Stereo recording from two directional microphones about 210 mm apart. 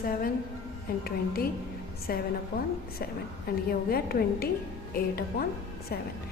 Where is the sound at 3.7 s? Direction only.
45° left (ahead or behind).